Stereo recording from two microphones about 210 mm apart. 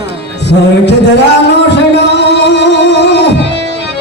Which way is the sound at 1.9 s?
55° left (ahead or behind).